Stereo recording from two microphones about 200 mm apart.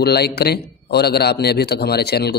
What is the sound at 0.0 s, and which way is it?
A man's voice, 55° left (ahead or behind).